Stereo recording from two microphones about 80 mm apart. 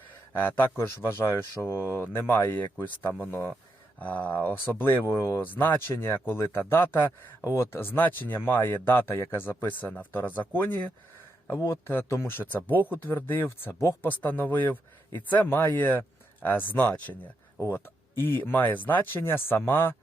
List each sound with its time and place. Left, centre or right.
0.3 s speech: left
11.6 s speech: left
17.6 s speech: left